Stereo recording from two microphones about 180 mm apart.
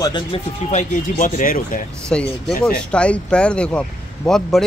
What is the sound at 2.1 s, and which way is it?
Speech, 5° left (ahead or behind).